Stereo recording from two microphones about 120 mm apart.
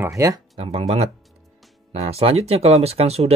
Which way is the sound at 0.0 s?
25° right (ahead or behind).